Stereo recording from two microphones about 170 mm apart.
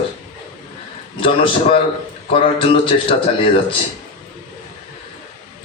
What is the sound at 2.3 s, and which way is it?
Speech, 30° left (ahead or behind).